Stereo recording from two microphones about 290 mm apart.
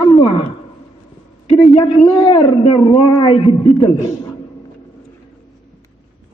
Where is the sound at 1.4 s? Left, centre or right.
Centre.